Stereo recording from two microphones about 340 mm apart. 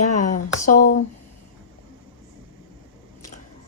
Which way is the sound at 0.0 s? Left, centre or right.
Left.